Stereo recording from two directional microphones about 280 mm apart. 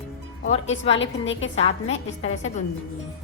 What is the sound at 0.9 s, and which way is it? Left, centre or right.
Speech, left.